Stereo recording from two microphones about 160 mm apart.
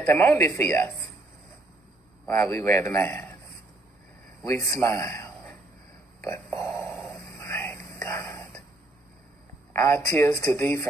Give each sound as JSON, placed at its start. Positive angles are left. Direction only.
{"t": 0.0, "sound": "speech", "side_deg": 15}
{"t": 2.2, "sound": "speech", "side_deg": 20}
{"t": 4.7, "sound": "a man's voice", "side_deg": 20}
{"t": 6.2, "sound": "burping", "side_deg": 15}
{"t": 6.9, "sound": "dog", "side_deg": 0}
{"t": 7.2, "sound": "a sound", "side_deg": 15}
{"t": 9.7, "sound": "speech", "side_deg": 15}